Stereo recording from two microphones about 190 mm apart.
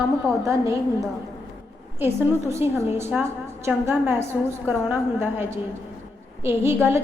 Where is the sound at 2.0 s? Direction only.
15° right (ahead or behind).